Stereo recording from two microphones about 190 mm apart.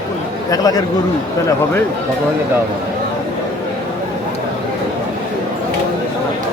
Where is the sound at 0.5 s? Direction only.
20° left (ahead or behind).